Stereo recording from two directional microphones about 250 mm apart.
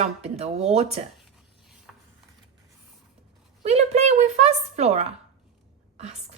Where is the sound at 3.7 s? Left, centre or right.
Right.